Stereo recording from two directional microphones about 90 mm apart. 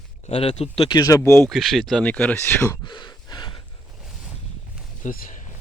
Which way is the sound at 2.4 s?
30° left (ahead or behind).